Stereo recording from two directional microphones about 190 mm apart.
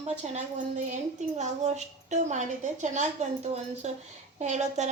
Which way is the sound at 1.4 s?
35° right (ahead or behind).